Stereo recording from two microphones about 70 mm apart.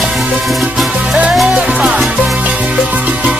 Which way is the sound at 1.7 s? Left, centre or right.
Centre.